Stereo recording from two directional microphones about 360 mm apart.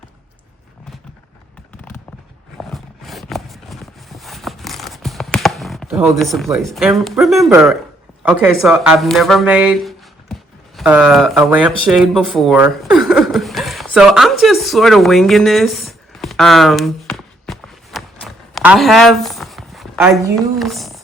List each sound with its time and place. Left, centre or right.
2.6 s horse: centre
8.2 s speech: centre